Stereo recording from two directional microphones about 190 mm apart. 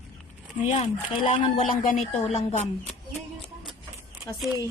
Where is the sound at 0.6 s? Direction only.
35° left (ahead or behind).